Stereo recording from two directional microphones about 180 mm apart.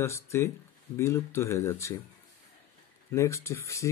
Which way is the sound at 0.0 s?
15° left (ahead or behind).